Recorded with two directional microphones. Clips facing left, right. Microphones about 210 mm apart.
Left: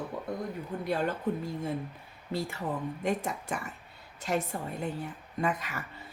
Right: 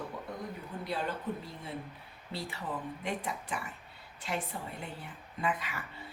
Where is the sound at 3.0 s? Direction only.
45° left (ahead or behind).